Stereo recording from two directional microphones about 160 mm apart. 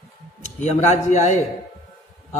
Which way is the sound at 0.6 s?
45° left (ahead or behind).